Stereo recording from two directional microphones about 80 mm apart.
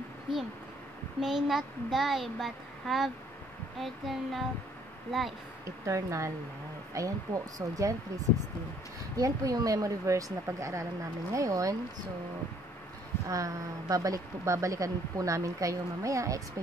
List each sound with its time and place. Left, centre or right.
1.2 s a child's voice: centre
5.9 s speech: right
9.1 s speech: right
13.3 s speech: right